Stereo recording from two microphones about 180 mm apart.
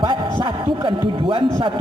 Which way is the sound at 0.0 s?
30° right (ahead or behind).